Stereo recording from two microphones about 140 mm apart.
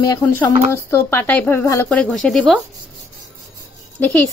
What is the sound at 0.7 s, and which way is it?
Speech, 20° left (ahead or behind).